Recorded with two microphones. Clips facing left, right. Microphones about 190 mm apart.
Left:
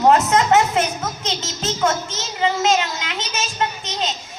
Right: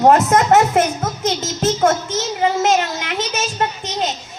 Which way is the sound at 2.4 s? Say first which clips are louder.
Right 2 dB; 50° right (ahead or behind).